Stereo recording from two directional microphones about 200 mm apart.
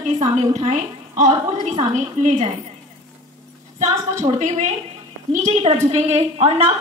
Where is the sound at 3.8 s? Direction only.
35° right (ahead or behind).